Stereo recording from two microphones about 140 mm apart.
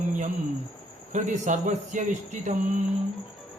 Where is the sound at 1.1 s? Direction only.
60° right (ahead or behind).